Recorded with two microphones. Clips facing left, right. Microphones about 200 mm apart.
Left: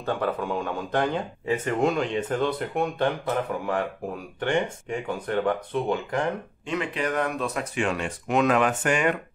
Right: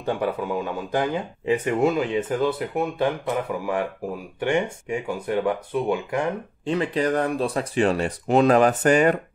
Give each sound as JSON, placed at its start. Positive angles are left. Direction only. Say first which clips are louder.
{"t": 0.0, "sound": "speech", "louder": "right 2 dB", "side_deg": -10}
{"t": 4.4, "sound": "speech", "louder": "right 2 dB", "side_deg": -10}
{"t": 6.6, "sound": "speech", "louder": "right 6 dB", "side_deg": -35}